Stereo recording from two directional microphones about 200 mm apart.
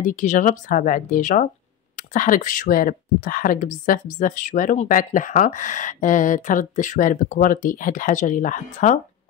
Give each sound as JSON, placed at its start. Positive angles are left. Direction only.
{"t": 0.0, "sound": "speech", "side_deg": 40}